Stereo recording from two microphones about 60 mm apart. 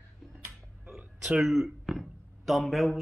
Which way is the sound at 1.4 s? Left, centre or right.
Centre.